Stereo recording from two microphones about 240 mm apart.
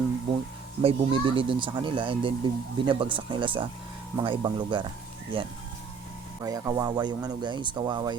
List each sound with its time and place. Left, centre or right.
0.8 s speech: right